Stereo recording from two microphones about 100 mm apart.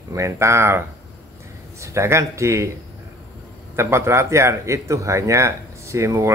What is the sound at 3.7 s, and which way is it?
Speech, 25° right (ahead or behind).